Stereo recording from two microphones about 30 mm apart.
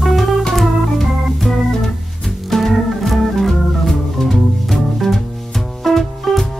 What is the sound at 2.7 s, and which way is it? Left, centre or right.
Organ, centre.